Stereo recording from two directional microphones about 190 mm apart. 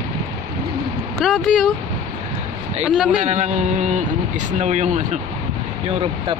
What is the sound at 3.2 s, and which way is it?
A man's voice, 40° right (ahead or behind).